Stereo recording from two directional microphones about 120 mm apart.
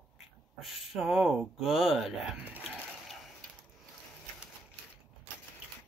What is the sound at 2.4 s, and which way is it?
Speech, 15° right (ahead or behind).